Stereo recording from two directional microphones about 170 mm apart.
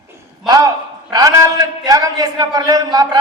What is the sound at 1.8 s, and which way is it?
Speech, 20° right (ahead or behind).